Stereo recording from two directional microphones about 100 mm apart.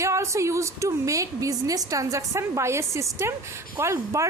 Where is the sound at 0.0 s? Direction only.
30° right (ahead or behind).